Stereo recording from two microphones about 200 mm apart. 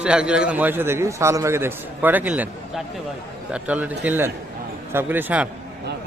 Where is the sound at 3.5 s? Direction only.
5° right (ahead or behind).